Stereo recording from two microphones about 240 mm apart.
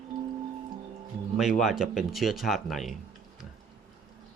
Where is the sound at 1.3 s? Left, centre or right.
Centre.